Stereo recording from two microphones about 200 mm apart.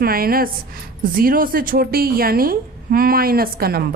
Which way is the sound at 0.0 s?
50° right (ahead or behind).